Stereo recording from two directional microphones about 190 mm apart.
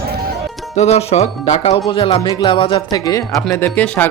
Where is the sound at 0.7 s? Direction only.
35° left (ahead or behind).